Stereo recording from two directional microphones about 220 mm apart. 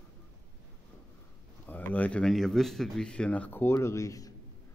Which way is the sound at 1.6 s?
10° left (ahead or behind).